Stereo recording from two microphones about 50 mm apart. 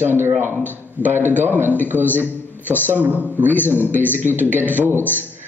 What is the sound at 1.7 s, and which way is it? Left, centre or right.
A man's voice, left.